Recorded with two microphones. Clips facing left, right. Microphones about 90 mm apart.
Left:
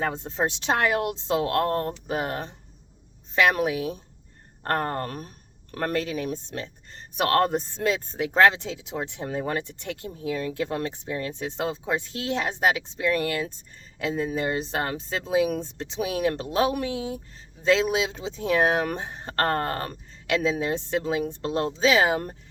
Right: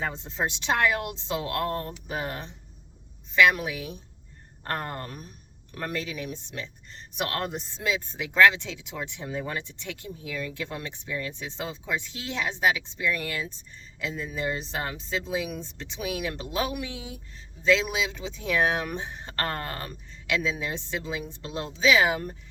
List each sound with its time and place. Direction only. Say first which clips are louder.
0.0 s speech: left 4 dB; 45° left (ahead or behind)